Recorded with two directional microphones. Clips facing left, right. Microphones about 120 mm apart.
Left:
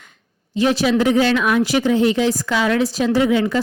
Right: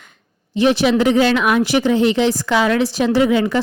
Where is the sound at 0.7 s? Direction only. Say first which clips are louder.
Right 2 dB; 65° right (ahead or behind).